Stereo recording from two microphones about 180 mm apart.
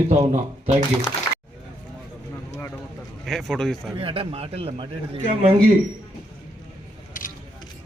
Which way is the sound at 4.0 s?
30° right (ahead or behind).